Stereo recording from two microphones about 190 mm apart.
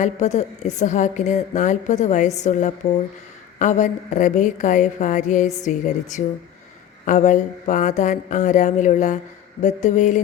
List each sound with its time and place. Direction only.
0.0 s a woman's voice: 40° left (ahead or behind)